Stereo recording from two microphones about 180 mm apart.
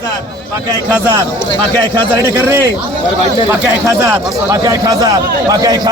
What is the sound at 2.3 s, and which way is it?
Speech, 15° right (ahead or behind).